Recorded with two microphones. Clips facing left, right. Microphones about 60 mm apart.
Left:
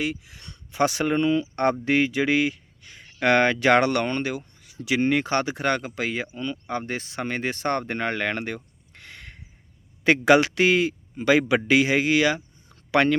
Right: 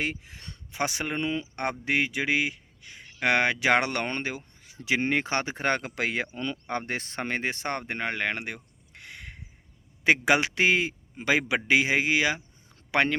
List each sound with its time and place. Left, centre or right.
0.0 s speech: right
0.7 s speech: right
5.8 s speech: right
7.4 s a man's voice: right